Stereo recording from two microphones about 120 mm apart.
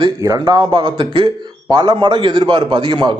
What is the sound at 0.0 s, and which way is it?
A man's voice, 35° right (ahead or behind).